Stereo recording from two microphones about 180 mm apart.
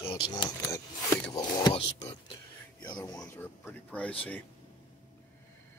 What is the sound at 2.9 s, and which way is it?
Speech, 20° left (ahead or behind).